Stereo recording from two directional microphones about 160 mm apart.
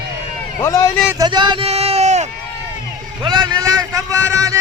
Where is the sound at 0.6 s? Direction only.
20° left (ahead or behind).